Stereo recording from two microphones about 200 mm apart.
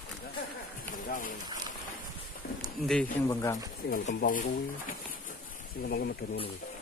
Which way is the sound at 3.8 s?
45° left (ahead or behind).